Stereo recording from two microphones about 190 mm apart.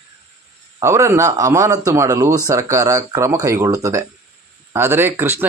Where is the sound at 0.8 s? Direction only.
15° right (ahead or behind).